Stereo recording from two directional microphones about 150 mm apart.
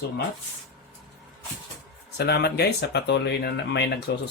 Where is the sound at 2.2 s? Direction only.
90° left.